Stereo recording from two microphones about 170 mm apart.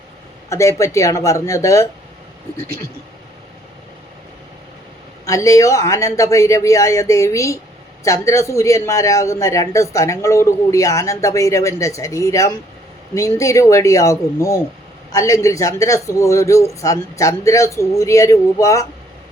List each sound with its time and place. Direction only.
0.5 s speech: 15° left (ahead or behind)
5.2 s a man's voice: 20° left (ahead or behind)